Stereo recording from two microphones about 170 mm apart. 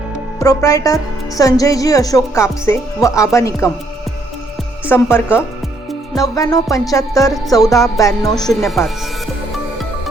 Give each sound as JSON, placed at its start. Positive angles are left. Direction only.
{"t": 0.3, "sound": "a woman's voice", "side_deg": 20}
{"t": 4.9, "sound": "a woman's voice", "side_deg": 15}
{"t": 8.4, "sound": "speech", "side_deg": 0}